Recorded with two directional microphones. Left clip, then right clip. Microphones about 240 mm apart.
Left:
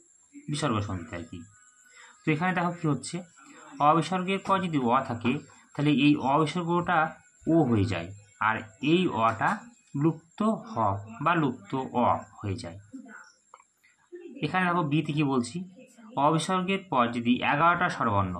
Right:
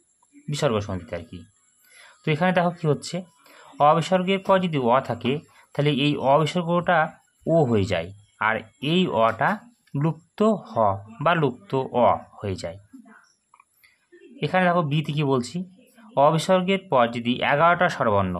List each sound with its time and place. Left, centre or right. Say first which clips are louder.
0.6 s speech: right 6 dB; right
2.2 s speech: right 6 dB; right
14.4 s speech: right 6 dB; right